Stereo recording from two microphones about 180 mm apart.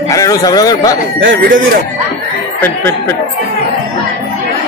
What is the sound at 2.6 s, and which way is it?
Speech, 10° left (ahead or behind).